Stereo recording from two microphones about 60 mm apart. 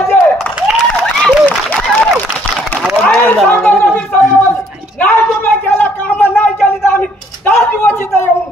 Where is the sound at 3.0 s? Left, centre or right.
Left.